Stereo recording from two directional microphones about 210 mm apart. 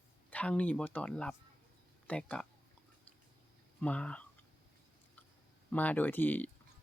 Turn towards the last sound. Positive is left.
turn(degrees=10)  # may be behind; listen again after turning